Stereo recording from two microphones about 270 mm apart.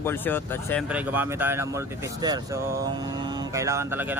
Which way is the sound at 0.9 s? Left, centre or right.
Centre.